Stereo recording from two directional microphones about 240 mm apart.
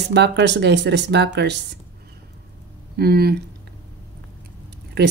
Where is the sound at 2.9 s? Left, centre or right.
Right.